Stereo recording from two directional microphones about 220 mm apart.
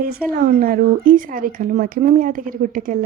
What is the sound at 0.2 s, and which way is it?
Speech, centre (ahead or behind).